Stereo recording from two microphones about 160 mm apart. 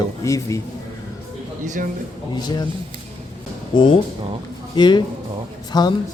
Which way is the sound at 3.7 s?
30° left (ahead or behind).